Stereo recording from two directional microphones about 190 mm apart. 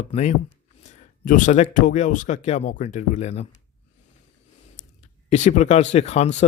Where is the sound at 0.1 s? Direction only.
35° left (ahead or behind).